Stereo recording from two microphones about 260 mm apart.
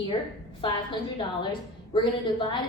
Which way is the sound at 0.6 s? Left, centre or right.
Centre.